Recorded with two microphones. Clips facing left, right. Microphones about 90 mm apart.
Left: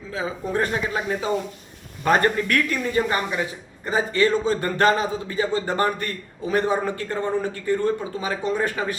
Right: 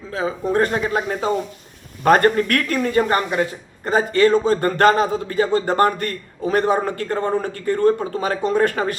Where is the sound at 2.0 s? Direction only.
50° right (ahead or behind).